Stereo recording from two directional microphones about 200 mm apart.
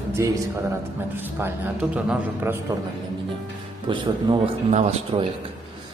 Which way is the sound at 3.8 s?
25° right (ahead or behind).